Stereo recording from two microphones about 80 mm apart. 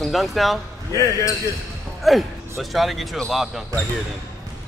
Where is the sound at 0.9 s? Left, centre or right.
Left.